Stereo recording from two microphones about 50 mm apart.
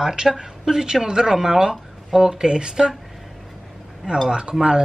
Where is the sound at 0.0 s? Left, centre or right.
Centre.